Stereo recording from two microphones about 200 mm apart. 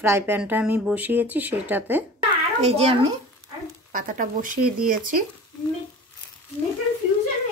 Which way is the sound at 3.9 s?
40° right (ahead or behind).